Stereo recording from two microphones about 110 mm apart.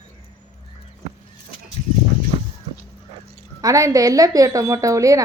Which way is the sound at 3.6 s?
30° right (ahead or behind).